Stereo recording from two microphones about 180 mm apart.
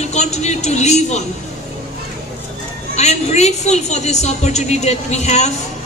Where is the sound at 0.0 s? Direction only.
40° left (ahead or behind).